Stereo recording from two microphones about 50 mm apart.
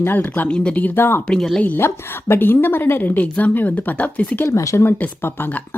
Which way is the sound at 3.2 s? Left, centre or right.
Left.